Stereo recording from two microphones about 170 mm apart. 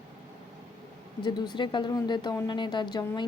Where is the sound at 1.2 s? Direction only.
25° left (ahead or behind).